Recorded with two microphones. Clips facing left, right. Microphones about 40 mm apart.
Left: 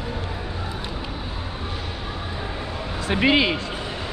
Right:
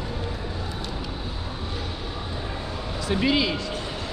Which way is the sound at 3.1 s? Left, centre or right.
Left.